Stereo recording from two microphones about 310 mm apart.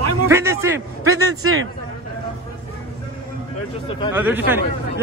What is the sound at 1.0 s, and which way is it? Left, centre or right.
Speech, right.